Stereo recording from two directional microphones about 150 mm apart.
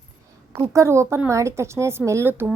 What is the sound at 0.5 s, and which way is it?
A woman's voice, 20° right (ahead or behind).